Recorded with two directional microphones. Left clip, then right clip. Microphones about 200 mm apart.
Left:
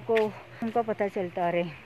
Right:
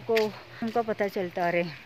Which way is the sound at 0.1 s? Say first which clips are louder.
Even; 10° right (ahead or behind).